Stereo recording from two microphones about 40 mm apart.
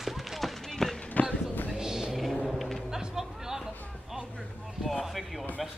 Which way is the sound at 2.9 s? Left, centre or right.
Centre.